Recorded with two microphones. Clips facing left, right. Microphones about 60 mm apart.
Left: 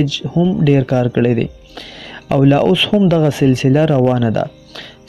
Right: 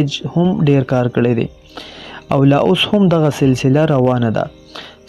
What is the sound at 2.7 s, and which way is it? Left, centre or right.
Speech, centre.